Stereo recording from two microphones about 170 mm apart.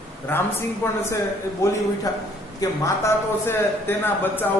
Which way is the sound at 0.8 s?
15° left (ahead or behind).